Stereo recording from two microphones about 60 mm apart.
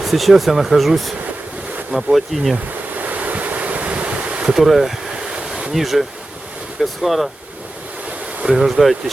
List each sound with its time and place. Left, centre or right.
0.0 s speech: centre
2.9 s ocean: right
4.5 s speech: centre
5.3 s waves: centre
5.7 s speech: centre
8.4 s speech: centre